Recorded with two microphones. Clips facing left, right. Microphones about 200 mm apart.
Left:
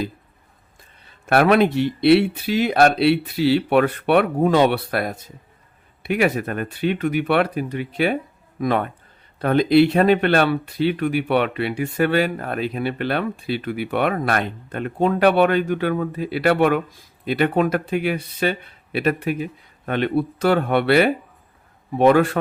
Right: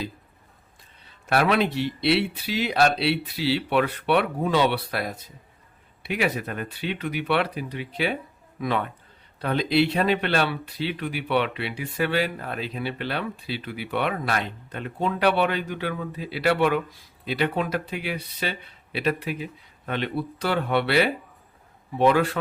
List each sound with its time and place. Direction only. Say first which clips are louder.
1.3 s speech: left 6 dB; 55° left (ahead or behind)